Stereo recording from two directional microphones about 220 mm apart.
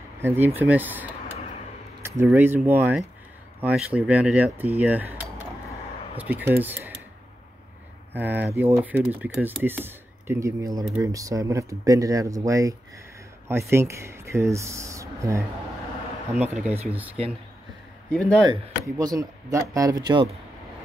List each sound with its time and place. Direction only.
0.2 s speech: 10° right (ahead or behind)
2.0 s speech: 10° right (ahead or behind)
8.1 s speech: 10° right (ahead or behind)
18.1 s speech: 5° left (ahead or behind)
18.9 s speech: 15° right (ahead or behind)